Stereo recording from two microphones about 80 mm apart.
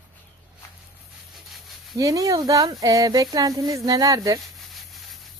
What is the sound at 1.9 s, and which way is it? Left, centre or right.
Speech, right.